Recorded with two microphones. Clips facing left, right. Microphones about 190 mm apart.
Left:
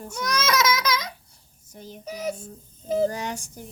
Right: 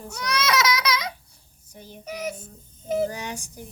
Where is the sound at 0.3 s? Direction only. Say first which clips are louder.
Even; 45° left (ahead or behind).